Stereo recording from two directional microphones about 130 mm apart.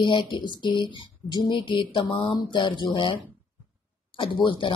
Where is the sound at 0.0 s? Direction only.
40° left (ahead or behind).